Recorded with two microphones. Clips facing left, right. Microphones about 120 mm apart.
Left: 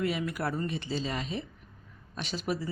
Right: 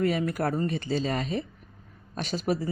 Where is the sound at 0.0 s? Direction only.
45° right (ahead or behind).